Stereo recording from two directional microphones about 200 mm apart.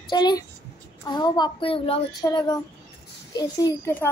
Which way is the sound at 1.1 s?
20° left (ahead or behind).